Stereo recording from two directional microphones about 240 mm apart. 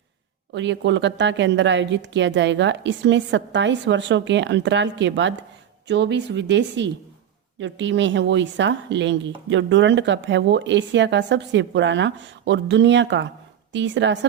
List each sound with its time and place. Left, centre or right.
0.5 s a woman's voice: right